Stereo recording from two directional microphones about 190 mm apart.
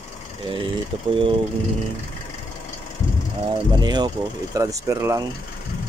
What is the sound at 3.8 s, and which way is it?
Speech, 20° right (ahead or behind).